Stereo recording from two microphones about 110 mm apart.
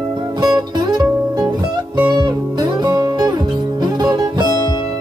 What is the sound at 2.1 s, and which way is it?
Music, 40° right (ahead or behind).